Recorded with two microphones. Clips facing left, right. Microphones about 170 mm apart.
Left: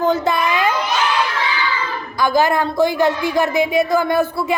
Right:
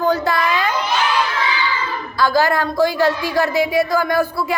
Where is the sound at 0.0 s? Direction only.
20° left (ahead or behind).